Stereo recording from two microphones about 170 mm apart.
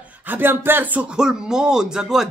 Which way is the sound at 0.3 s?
10° right (ahead or behind).